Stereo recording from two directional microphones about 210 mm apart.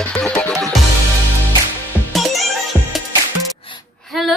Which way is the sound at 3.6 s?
25° left (ahead or behind).